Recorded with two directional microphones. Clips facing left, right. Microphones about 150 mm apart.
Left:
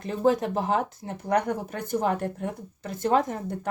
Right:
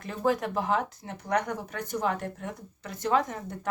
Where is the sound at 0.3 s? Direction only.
30° left (ahead or behind).